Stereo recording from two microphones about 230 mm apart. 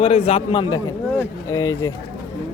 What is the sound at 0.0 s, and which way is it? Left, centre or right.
Speech, left.